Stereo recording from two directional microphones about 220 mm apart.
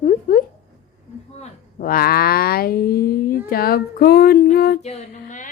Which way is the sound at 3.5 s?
45° left (ahead or behind).